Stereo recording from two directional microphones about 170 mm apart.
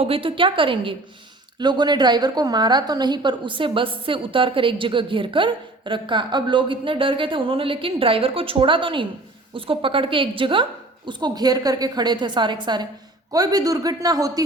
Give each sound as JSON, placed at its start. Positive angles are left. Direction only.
{"t": 0.0, "sound": "a woman's voice", "side_deg": -30}